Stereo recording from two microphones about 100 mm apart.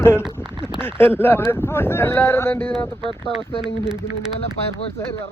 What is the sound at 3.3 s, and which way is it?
Speech, 5° right (ahead or behind).